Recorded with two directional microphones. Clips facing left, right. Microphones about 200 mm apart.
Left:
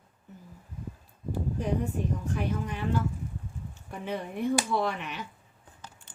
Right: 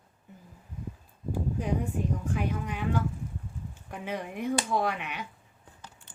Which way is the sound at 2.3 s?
10° right (ahead or behind).